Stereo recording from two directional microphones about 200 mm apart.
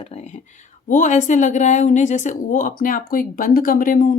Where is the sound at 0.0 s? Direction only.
35° left (ahead or behind).